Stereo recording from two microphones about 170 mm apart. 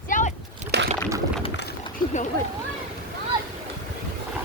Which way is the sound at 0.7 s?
80° right.